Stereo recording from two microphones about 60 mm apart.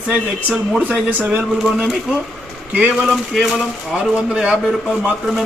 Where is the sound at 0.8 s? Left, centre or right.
Right.